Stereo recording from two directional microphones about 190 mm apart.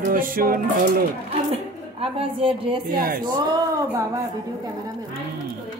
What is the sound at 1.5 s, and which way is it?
Speech, 30° right (ahead or behind).